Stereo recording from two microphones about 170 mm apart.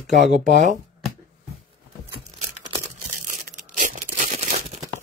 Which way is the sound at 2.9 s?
50° right (ahead or behind).